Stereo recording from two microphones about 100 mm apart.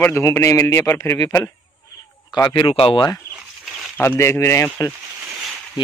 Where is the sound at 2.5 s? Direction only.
60° left (ahead or behind).